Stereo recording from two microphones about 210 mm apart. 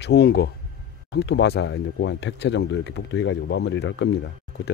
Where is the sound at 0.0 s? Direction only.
50° left (ahead or behind).